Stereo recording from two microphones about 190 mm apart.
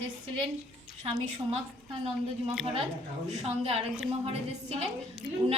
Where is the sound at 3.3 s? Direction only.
30° right (ahead or behind).